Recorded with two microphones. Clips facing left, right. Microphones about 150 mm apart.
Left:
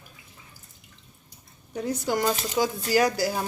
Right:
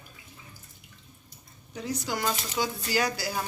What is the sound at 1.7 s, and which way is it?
Speech, 55° left (ahead or behind).